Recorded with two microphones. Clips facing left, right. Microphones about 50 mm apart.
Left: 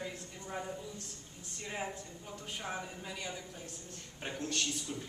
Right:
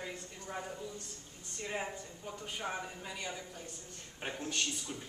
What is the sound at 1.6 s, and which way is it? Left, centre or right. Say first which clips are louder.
A man's voice: right 1 dB; centre.